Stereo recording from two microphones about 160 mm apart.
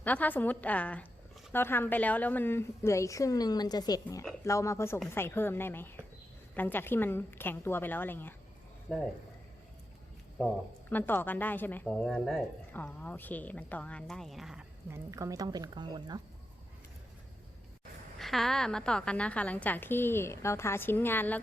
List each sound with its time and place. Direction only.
0.0 s a woman's voice: 10° left (ahead or behind)
10.8 s a woman's voice: 10° left (ahead or behind)
14.8 s speech: 15° right (ahead or behind)
18.2 s a woman's voice: centre (ahead or behind)